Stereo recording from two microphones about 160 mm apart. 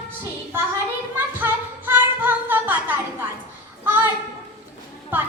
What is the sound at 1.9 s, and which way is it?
Child singing, 10° right (ahead or behind).